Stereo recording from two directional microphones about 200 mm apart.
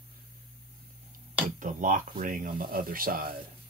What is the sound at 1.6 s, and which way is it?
Speech, 40° right (ahead or behind).